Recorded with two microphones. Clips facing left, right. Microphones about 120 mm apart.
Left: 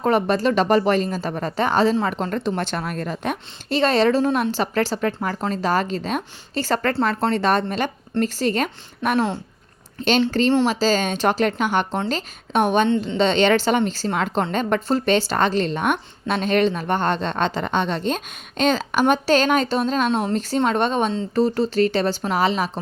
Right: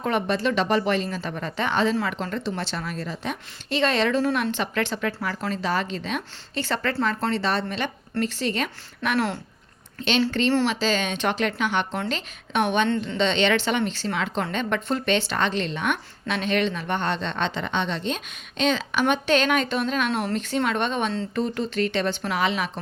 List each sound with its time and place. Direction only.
0.0 s a woman's voice: 40° left (ahead or behind)
9.1 s speech: 15° left (ahead or behind)
10.0 s a woman's voice: 40° left (ahead or behind)
20.1 s speech: 20° left (ahead or behind)
20.3 s a woman's voice: 35° left (ahead or behind)